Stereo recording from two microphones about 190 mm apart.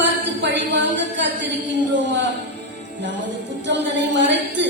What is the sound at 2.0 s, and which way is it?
Speech, 70° right (ahead or behind).